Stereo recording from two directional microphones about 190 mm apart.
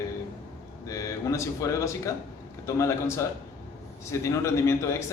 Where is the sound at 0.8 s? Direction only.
15° left (ahead or behind).